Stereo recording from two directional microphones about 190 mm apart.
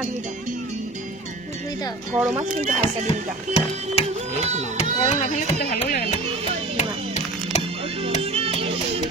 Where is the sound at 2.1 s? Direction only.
10° right (ahead or behind).